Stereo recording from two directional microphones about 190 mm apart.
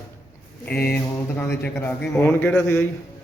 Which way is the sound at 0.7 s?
55° left (ahead or behind).